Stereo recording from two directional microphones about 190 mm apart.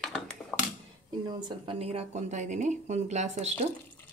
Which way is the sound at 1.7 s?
30° right (ahead or behind).